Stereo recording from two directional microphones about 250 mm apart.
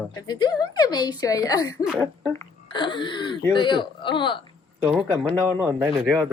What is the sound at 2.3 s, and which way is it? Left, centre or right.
Speech, centre.